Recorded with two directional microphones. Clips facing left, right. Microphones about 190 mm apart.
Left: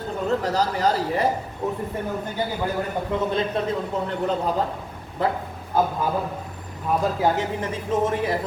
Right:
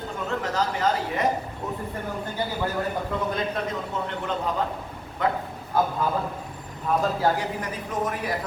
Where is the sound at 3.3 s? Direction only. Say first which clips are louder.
Left 4 dB; 30° left (ahead or behind).